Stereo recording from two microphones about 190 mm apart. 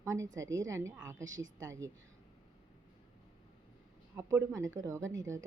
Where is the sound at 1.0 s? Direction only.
85° right.